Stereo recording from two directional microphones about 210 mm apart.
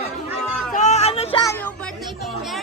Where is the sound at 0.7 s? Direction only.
35° left (ahead or behind).